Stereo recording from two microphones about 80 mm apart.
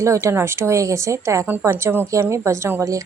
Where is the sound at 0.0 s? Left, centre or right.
Right.